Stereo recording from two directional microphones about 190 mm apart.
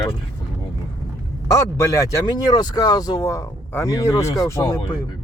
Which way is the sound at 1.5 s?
15° left (ahead or behind).